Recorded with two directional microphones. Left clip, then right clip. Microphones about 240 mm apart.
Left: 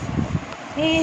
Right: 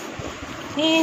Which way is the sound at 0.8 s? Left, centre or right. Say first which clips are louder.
Even; centre.